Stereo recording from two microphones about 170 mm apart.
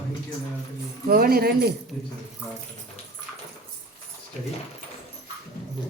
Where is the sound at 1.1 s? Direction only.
60° right (ahead or behind).